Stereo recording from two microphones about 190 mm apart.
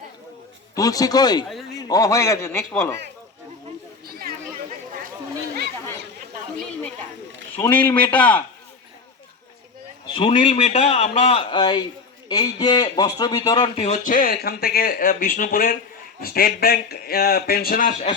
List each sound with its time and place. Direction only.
0.8 s a man's voice: 20° left (ahead or behind)
4.0 s a sound: 50° right (ahead or behind)
7.5 s a man's voice: 10° left (ahead or behind)
10.2 s a man's voice: 25° left (ahead or behind)
13.8 s speech: 40° left (ahead or behind)